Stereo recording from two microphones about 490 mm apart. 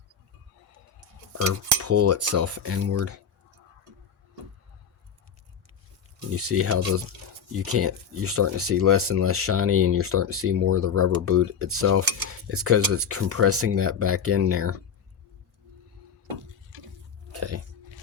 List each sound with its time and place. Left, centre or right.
0.9 s cutlery: right
6.3 s speech: right
17.3 s biting: right